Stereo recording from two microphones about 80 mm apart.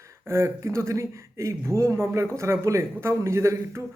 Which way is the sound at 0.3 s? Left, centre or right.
Right.